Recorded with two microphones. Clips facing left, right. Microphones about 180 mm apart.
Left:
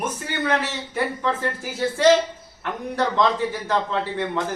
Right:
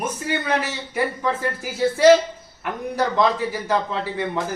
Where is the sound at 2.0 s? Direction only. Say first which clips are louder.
Right 3 dB; 10° right (ahead or behind).